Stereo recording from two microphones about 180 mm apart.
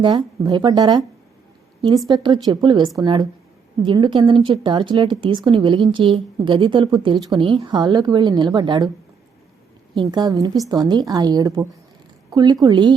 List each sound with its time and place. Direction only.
0.0 s a woman's voice: 25° right (ahead or behind)
9.9 s a woman's voice: 25° right (ahead or behind)